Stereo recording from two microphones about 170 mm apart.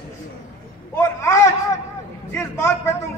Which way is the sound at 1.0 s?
15° left (ahead or behind).